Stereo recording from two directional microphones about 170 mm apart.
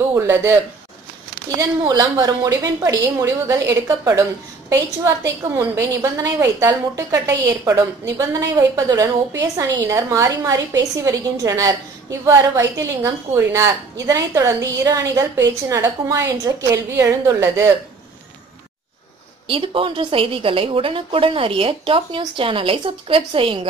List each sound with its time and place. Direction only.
0.1 s a woman's voice: 15° right (ahead or behind)
1.6 s a woman's voice: 20° right (ahead or behind)
19.4 s a woman's voice: 30° right (ahead or behind)